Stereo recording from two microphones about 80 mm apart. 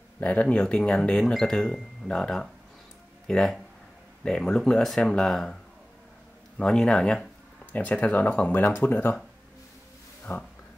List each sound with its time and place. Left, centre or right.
0.2 s speech: centre
6.6 s speech: centre
7.7 s speech: centre
10.3 s speech: left